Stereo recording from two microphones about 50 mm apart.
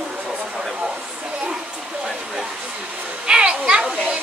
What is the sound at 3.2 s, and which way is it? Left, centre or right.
Children playing, centre.